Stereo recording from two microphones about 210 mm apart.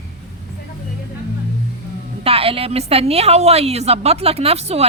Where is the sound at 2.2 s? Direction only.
25° right (ahead or behind).